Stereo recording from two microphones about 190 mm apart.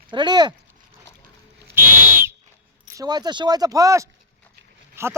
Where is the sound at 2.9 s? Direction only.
20° right (ahead or behind).